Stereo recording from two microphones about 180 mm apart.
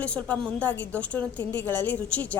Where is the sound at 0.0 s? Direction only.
5° left (ahead or behind).